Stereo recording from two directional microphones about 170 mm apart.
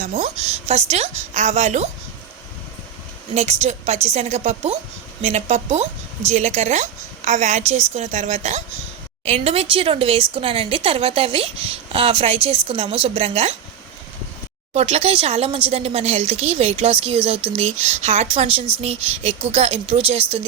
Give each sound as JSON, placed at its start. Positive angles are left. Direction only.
{"t": 0.0, "sound": "a woman's voice", "side_deg": -40}
{"t": 3.3, "sound": "a woman's voice", "side_deg": -40}
{"t": 14.7, "sound": "a woman's voice", "side_deg": -40}